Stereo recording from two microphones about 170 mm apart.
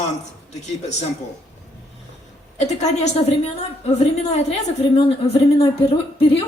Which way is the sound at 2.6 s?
40° left (ahead or behind).